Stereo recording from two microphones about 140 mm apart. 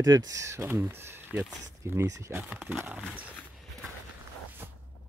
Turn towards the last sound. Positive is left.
turn(degrees=-15)  # may be behind; listen again after turning